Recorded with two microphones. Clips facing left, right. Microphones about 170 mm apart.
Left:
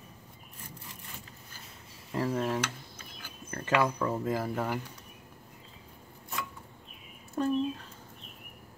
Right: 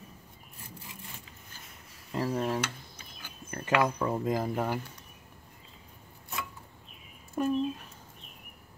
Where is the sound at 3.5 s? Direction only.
15° right (ahead or behind).